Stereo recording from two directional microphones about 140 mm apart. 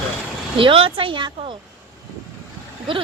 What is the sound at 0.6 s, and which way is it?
Speech, 40° right (ahead or behind).